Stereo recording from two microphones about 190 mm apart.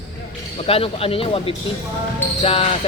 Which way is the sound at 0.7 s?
30° left (ahead or behind).